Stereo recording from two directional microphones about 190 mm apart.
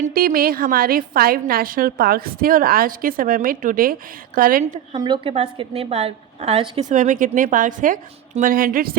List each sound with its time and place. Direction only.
0.0 s a woman's voice: 50° right (ahead or behind)
4.6 s a woman's voice: 35° right (ahead or behind); by 9.0 s 50° right (ahead or behind)